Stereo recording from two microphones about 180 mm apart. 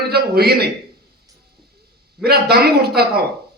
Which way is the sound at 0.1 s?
60° right (ahead or behind).